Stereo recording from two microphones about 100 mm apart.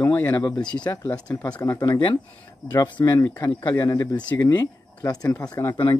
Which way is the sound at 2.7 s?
45° left (ahead or behind).